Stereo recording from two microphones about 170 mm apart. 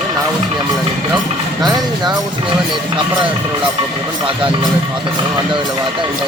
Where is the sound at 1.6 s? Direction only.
25° right (ahead or behind).